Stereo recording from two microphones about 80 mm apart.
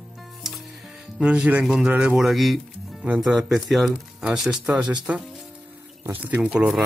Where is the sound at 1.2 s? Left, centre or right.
Centre.